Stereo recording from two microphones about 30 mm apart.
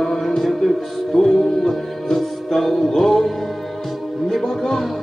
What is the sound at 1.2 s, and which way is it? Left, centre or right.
Music, left.